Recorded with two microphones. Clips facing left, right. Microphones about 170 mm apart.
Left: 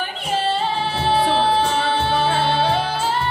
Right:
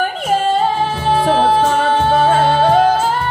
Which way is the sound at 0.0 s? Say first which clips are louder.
Right 7 dB; 45° right (ahead or behind).